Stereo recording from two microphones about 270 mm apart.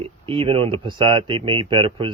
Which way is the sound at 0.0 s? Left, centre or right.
Centre.